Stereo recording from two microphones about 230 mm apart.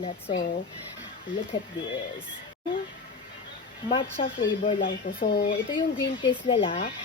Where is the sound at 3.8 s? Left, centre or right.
Left.